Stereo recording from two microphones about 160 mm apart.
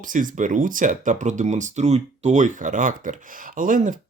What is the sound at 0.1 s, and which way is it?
Speech, 55° right (ahead or behind).